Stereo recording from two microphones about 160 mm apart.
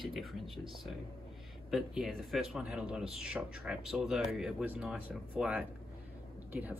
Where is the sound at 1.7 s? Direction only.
Centre (ahead or behind).